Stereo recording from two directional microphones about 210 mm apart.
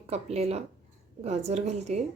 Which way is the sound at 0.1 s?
30° right (ahead or behind).